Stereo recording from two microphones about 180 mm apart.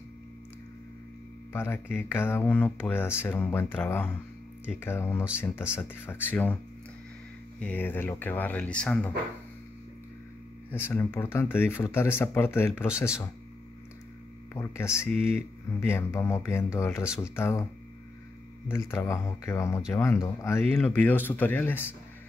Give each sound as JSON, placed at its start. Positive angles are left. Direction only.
{"t": 1.5, "sound": "speech", "side_deg": 10}
{"t": 7.6, "sound": "speech", "side_deg": 10}
{"t": 10.7, "sound": "speech", "side_deg": 10}
{"t": 14.5, "sound": "speech", "side_deg": 15}
{"t": 18.7, "sound": "speech", "side_deg": 15}